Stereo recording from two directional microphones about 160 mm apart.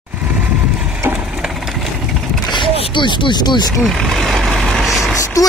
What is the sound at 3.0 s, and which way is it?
Speech, 30° left (ahead or behind).